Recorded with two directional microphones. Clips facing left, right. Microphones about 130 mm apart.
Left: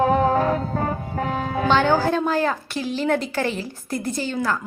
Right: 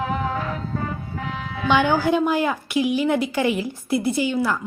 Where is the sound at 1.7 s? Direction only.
15° right (ahead or behind).